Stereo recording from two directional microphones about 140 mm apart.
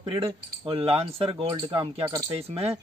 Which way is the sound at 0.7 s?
45° right (ahead or behind).